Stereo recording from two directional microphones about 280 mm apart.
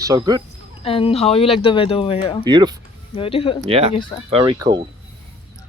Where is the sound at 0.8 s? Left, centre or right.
Centre.